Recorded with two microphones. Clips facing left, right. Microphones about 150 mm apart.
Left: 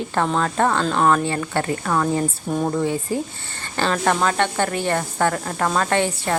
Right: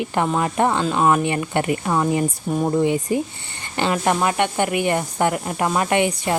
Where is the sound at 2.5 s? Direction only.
5° right (ahead or behind).